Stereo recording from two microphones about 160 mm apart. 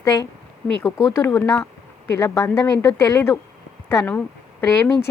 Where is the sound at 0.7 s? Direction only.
5° left (ahead or behind).